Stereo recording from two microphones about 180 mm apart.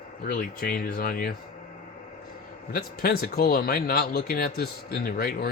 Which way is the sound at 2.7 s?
55° left (ahead or behind).